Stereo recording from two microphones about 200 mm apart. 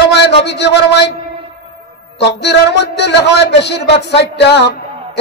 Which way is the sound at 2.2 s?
60° left (ahead or behind).